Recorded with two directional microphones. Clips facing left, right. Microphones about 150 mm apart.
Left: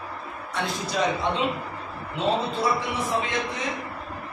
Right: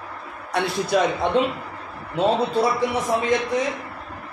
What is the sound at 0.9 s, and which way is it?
Speech, 55° right (ahead or behind).